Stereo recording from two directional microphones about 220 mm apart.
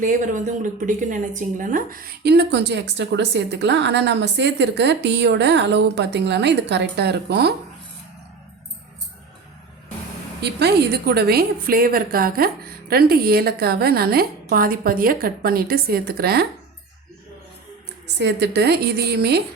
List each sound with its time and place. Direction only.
0.0 s speech: 35° right (ahead or behind)
10.4 s speech: 50° right (ahead or behind)
18.2 s speech: 50° right (ahead or behind)